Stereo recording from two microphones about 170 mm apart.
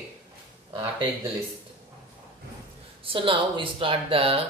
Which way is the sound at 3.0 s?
30° right (ahead or behind).